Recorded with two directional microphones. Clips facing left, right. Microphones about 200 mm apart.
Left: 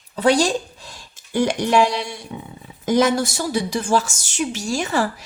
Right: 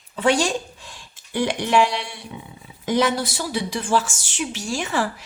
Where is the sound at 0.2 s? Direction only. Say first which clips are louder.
Left 3 dB; 35° left (ahead or behind).